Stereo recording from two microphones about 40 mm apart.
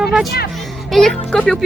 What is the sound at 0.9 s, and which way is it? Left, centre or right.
Speech, centre.